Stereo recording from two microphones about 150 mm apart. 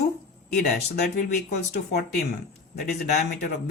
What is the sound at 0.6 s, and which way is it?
Speech, 90° left.